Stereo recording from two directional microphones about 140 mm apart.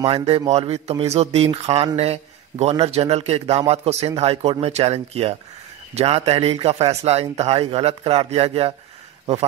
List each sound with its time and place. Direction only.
0.0 s a man's voice: 45° right (ahead or behind)